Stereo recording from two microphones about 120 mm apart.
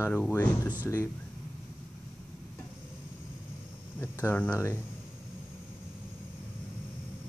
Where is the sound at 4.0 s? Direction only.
15° left (ahead or behind).